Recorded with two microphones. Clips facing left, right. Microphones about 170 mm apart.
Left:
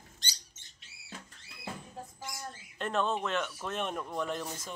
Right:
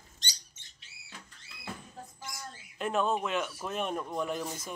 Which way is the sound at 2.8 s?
5° right (ahead or behind).